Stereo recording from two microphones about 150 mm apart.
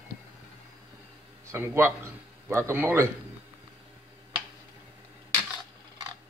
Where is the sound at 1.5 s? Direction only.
15° right (ahead or behind).